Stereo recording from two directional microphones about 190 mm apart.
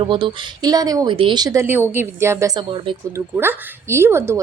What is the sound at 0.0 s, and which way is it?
A woman's voice, 25° right (ahead or behind).